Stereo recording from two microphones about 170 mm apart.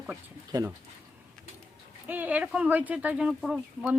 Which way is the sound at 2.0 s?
10° right (ahead or behind).